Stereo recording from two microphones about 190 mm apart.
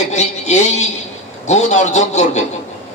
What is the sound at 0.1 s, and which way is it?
A man's voice, 35° left (ahead or behind).